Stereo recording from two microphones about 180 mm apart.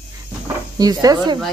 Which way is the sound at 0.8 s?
20° right (ahead or behind).